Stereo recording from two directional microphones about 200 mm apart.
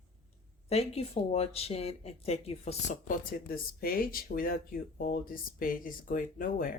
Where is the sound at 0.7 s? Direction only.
30° left (ahead or behind).